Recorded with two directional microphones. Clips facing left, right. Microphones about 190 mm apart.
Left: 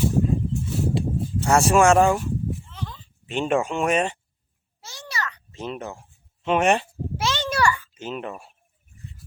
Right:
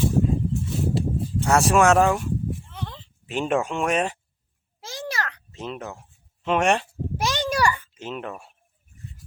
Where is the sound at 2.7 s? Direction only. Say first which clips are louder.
Even; 60° right (ahead or behind).